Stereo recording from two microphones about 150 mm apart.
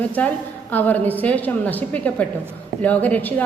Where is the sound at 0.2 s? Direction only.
10° left (ahead or behind).